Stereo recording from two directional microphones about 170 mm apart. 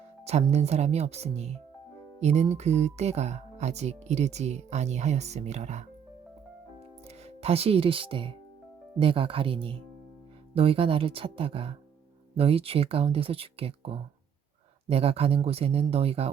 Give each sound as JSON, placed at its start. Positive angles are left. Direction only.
{"t": 0.3, "sound": "speech", "side_deg": -40}
{"t": 7.3, "sound": "speech", "side_deg": -35}